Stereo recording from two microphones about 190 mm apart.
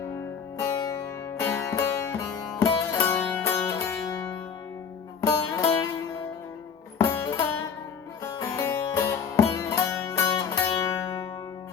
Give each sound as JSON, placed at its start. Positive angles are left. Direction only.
{"t": 0.6, "sound": "music", "side_deg": 20}
{"t": 5.2, "sound": "music", "side_deg": 20}